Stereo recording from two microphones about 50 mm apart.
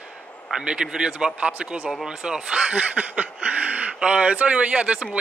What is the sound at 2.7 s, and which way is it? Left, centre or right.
Speech, right.